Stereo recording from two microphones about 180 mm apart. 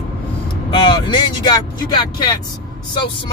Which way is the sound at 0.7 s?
25° left (ahead or behind).